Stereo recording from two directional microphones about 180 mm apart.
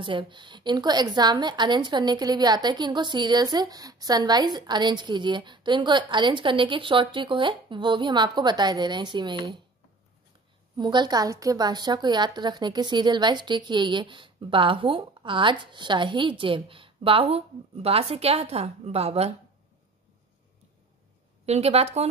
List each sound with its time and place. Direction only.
0.0 s a woman's voice: 25° right (ahead or behind)
10.8 s a woman's voice: 25° right (ahead or behind)
21.5 s a woman's voice: 35° right (ahead or behind)